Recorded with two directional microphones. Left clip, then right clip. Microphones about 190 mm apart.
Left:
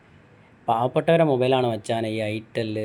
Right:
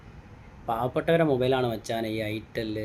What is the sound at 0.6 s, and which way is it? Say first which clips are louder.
Speech: left 5 dB; 20° left (ahead or behind).